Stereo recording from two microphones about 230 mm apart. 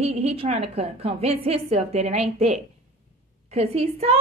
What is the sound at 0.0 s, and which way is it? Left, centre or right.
A woman's voice, right.